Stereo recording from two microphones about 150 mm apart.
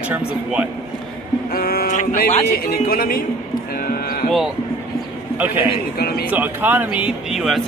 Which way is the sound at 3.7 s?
90° left.